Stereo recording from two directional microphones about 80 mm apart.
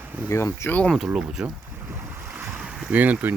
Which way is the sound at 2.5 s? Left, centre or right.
Centre.